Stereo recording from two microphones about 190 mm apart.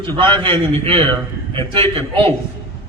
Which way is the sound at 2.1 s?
30° right (ahead or behind).